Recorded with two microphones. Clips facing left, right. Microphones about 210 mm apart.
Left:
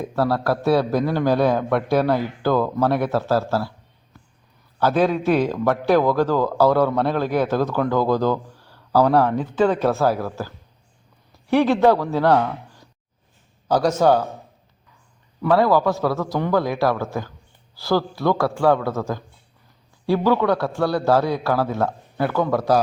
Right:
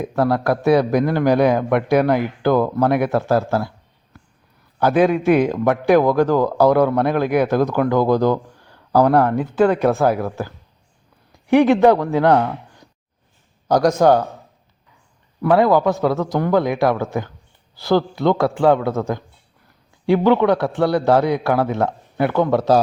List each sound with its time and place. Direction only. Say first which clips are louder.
0.0 s a man's voice: right 3 dB; 15° right (ahead or behind)
4.8 s a man's voice: right 3 dB; 15° right (ahead or behind)
15.4 s a man's voice: right 2 dB; 20° right (ahead or behind)